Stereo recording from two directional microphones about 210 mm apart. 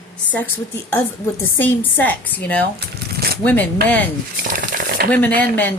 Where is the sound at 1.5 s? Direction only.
10° left (ahead or behind).